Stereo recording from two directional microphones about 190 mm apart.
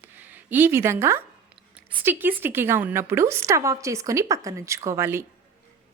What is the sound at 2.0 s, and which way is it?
A woman's voice, 10° right (ahead or behind).